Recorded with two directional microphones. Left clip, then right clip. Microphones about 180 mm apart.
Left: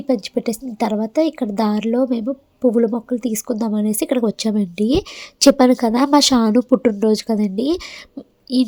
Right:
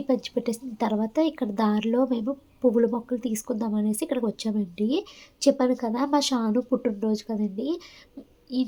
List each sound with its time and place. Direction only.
0.1 s a woman's voice: 30° left (ahead or behind); by 8.6 s 50° left (ahead or behind)